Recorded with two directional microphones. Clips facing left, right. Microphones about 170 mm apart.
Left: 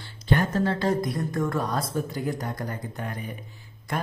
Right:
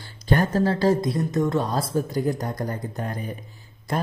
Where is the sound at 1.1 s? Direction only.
20° right (ahead or behind).